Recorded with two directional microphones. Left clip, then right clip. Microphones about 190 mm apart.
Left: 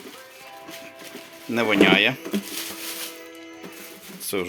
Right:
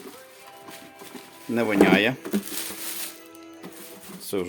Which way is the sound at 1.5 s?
15° right (ahead or behind).